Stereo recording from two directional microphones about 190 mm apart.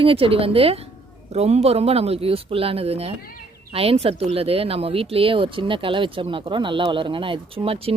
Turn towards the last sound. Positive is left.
turn(degrees=-30)  # may be behind; listen again after turning